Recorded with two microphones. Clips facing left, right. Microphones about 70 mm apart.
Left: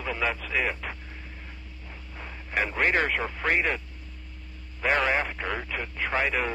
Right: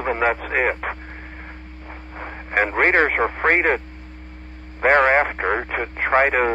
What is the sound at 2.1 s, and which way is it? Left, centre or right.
Speech, right.